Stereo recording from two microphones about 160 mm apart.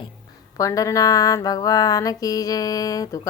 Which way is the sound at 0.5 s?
20° left (ahead or behind).